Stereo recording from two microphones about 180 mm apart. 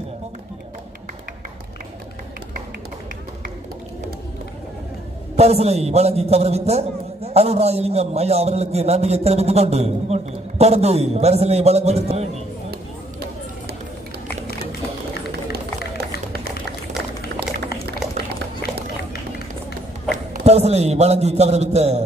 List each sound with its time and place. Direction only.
5.3 s a man's voice: 35° right (ahead or behind)
20.4 s a man's voice: 35° right (ahead or behind)